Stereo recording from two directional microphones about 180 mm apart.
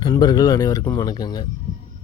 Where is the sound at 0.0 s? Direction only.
25° left (ahead or behind).